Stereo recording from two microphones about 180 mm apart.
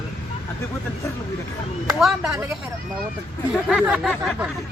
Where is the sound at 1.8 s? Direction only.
Centre (ahead or behind).